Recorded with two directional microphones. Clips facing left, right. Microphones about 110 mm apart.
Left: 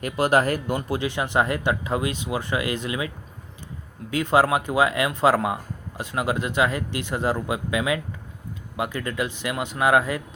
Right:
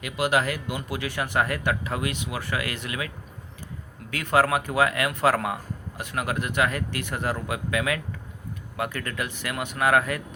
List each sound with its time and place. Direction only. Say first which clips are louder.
0.0 s speech: left 4 dB; 40° left (ahead or behind); by 3.1 s 20° left (ahead or behind)
4.1 s speech: left 2 dB; 20° left (ahead or behind)